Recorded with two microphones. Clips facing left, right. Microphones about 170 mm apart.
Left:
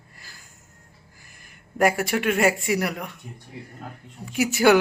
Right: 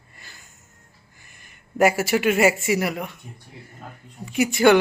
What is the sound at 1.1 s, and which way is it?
Speech, centre (ahead or behind).